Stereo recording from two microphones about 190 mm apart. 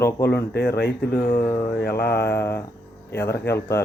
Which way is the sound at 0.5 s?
60° left (ahead or behind).